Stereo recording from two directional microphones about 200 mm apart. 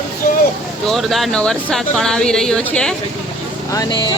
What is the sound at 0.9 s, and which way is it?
Speech, centre (ahead or behind).